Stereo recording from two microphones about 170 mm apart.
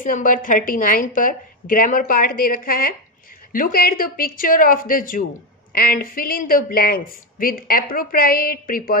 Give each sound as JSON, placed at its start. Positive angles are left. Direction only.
{"t": 0.0, "sound": "speech", "side_deg": 55}